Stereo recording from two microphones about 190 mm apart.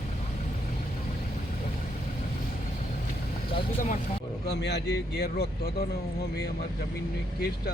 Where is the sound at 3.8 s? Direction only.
40° left (ahead or behind).